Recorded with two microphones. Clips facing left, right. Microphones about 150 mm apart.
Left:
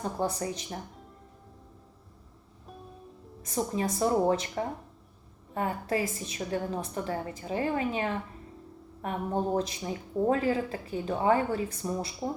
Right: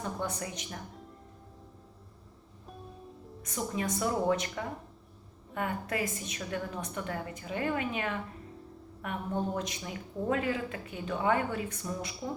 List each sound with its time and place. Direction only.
0.2 s speech: 35° left (ahead or behind)
3.4 s speech: 30° left (ahead or behind)